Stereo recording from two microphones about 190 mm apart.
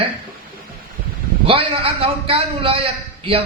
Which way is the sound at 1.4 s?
30° right (ahead or behind).